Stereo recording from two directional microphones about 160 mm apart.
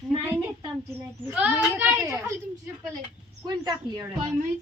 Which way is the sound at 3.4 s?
25° right (ahead or behind).